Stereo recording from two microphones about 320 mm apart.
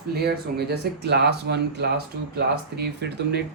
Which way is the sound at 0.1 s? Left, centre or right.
Right.